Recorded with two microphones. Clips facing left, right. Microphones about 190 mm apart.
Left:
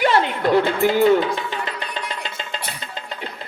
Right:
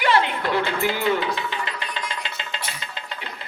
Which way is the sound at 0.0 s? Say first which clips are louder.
Left 3 dB; 45° left (ahead or behind).